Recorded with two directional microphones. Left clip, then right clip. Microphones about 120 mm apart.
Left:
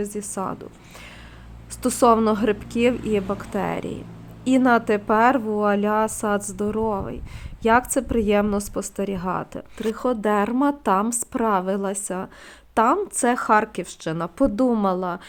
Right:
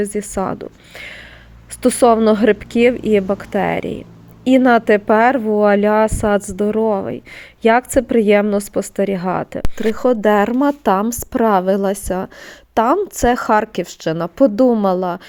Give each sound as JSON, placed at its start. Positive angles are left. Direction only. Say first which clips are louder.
{"t": 0.0, "sound": "a woman's voice", "louder": "right 8 dB", "side_deg": -35}